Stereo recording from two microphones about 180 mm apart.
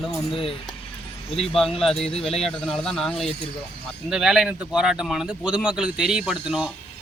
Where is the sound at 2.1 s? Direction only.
35° left (ahead or behind).